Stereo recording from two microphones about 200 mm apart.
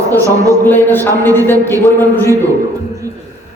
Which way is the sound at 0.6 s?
10° left (ahead or behind).